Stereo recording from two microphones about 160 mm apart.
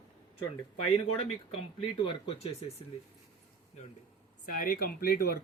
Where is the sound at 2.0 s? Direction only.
35° left (ahead or behind).